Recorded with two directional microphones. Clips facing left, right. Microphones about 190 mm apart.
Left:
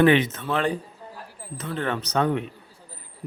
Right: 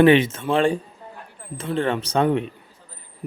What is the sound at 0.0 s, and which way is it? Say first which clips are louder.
A man's voice: right 4 dB; 25° right (ahead or behind).